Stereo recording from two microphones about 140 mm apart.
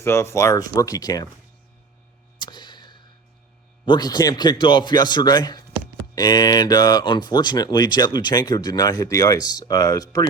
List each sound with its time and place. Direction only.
0.0 s speech: 20° left (ahead or behind)
2.4 s a sound: 30° left (ahead or behind)
3.8 s a man's voice: 30° left (ahead or behind)